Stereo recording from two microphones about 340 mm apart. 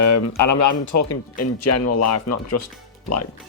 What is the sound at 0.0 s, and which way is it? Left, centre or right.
Speech, left.